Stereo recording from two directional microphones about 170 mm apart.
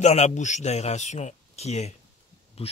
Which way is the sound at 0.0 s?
40° left (ahead or behind).